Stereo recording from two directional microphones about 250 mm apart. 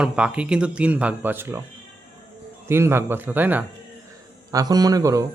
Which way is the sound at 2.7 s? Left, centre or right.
Centre.